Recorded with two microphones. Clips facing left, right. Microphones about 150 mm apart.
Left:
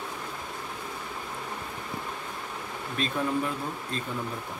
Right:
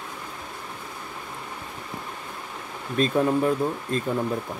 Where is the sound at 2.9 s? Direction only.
45° right (ahead or behind).